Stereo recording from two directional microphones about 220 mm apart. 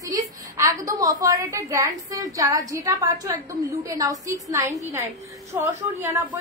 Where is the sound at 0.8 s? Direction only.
15° right (ahead or behind).